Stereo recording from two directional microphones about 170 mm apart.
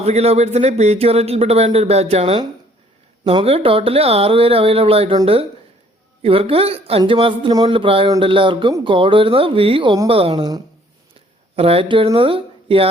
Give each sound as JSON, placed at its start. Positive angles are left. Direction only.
{"t": 0.0, "sound": "speech", "side_deg": -40}